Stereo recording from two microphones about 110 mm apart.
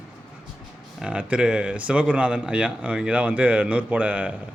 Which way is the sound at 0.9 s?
10° right (ahead or behind).